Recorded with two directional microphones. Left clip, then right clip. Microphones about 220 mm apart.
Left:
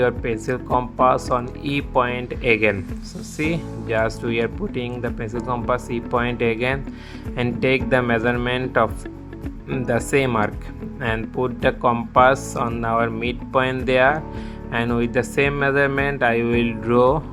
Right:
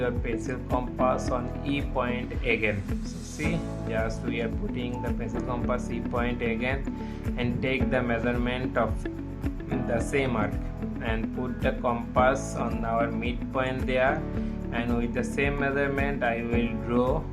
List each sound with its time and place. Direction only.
0.4 s speech: 30° left (ahead or behind)
11.6 s speech: 30° left (ahead or behind)